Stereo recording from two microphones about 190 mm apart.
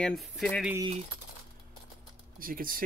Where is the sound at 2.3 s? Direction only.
50° right (ahead or behind).